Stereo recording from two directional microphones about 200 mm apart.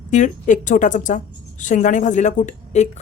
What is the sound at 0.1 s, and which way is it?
A woman's voice, 40° left (ahead or behind).